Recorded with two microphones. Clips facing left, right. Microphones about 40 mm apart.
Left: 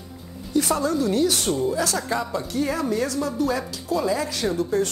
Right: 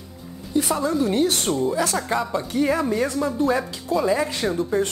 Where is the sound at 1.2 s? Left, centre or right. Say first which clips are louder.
Even; right.